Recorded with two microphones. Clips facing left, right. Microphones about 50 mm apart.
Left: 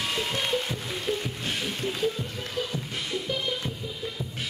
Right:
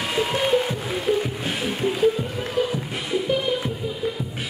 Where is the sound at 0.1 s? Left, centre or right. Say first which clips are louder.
Right 10 dB; centre.